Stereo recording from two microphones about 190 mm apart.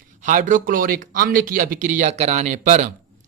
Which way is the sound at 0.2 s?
45° right (ahead or behind).